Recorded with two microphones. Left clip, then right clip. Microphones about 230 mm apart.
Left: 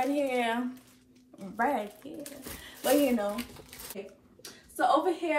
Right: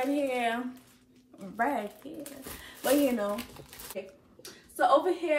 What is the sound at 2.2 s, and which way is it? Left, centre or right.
Speech, centre.